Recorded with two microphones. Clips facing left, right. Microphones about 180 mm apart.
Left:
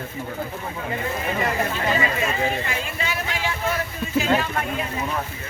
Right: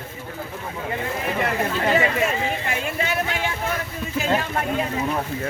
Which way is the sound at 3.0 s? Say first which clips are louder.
Right 3 dB; 55° right (ahead or behind).